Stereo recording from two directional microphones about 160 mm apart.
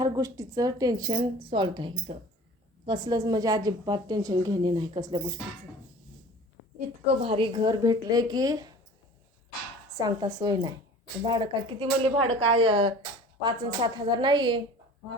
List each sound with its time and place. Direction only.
0.0 s speech: 20° right (ahead or behind)
7.2 s speech: 35° right (ahead or behind)
9.9 s speech: 25° right (ahead or behind)